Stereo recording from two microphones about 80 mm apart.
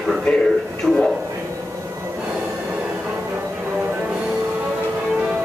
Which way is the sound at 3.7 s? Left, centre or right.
Centre.